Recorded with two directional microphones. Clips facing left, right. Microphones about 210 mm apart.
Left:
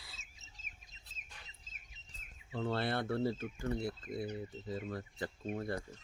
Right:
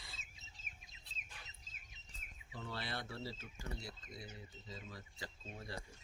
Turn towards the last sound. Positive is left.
turn(degrees=55)  # may be behind; listen again after turning